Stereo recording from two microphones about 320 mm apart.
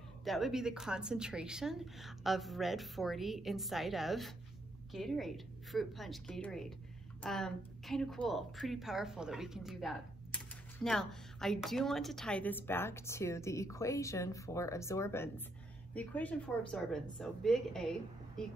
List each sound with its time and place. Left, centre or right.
0.2 s speech: centre